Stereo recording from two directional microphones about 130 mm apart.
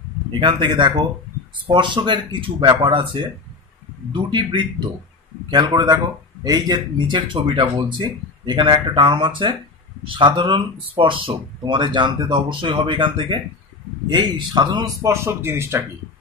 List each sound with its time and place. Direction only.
0.4 s speech: 40° right (ahead or behind)
15.0 s speech: 20° right (ahead or behind)